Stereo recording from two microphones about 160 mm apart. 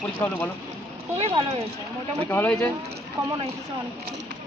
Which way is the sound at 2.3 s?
15° left (ahead or behind).